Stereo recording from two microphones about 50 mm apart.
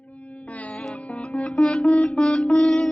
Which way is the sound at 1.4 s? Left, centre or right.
Centre.